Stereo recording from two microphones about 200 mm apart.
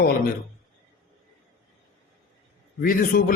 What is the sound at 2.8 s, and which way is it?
Speech, 45° left (ahead or behind).